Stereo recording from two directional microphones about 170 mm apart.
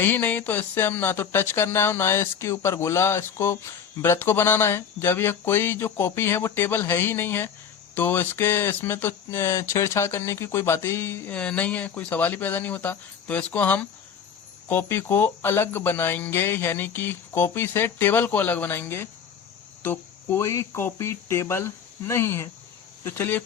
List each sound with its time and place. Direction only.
0.0 s speech: 10° left (ahead or behind)